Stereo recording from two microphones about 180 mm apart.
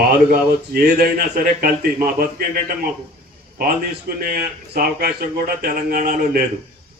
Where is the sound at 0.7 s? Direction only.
55° right (ahead or behind).